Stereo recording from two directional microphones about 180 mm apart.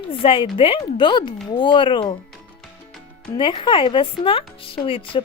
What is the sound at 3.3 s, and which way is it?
Speech, 25° left (ahead or behind).